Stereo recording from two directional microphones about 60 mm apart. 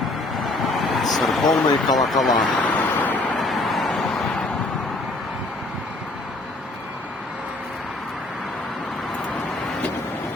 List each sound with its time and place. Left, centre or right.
0.3 s vehicle: centre
2.0 s speech: centre
2.6 s vehicle: left
3.3 s vehicle: centre